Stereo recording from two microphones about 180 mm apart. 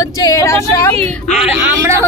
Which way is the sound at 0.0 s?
20° left (ahead or behind).